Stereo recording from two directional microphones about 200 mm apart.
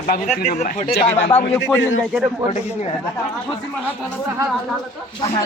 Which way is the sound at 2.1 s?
5° right (ahead or behind).